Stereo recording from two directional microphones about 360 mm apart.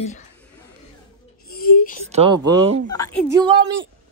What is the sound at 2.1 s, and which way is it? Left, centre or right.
Speech, centre.